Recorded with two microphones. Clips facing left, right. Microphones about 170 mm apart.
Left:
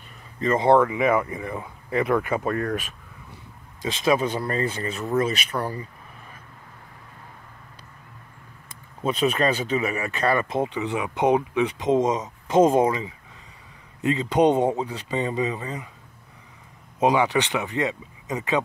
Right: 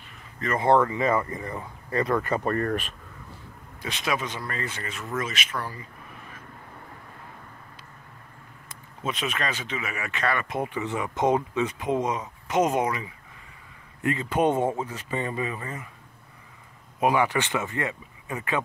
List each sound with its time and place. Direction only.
0.4 s speech: 25° left (ahead or behind)
0.7 s speech: 10° left (ahead or behind)
4.0 s speech: 30° left (ahead or behind)
9.0 s speech: 35° left (ahead or behind)
10.6 s speech: 20° left (ahead or behind)
17.0 s speech: 20° left (ahead or behind)